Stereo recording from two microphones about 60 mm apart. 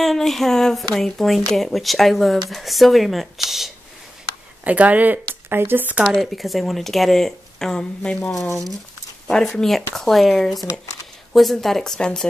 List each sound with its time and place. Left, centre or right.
0.0 s speech: centre
4.6 s speech: right
6.1 s speech: centre